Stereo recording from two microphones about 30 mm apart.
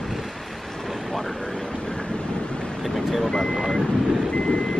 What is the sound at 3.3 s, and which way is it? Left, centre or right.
Vehicle, left.